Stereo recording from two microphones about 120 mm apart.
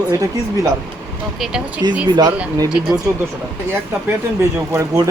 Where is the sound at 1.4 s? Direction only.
5° right (ahead or behind).